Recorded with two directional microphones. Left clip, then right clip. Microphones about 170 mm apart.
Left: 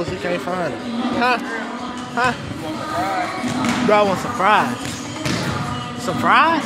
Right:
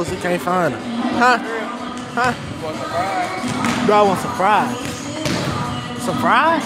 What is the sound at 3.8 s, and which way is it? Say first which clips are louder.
Speech: right 2 dB; 25° right (ahead or behind).